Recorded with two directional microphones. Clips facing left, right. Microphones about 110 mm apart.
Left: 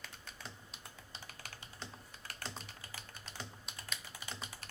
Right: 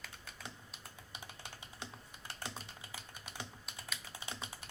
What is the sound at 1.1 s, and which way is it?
Computer keyboard, 15° right (ahead or behind).